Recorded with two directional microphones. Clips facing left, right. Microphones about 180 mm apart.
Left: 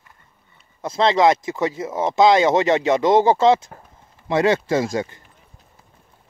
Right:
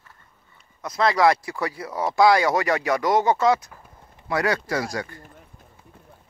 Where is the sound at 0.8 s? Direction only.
25° left (ahead or behind).